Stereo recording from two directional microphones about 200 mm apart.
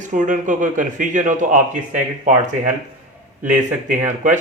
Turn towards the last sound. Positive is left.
turn(degrees=-40)  # may be behind; listen again after turning